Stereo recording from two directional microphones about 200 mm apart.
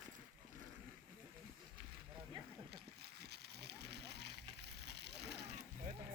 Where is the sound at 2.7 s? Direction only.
55° right (ahead or behind).